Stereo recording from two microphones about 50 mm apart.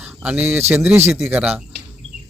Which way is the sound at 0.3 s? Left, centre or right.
Right.